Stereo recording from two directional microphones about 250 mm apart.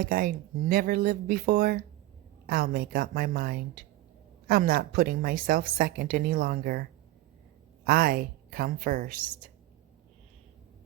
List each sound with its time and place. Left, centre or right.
0.0 s a woman's voice: right
7.9 s a woman's voice: right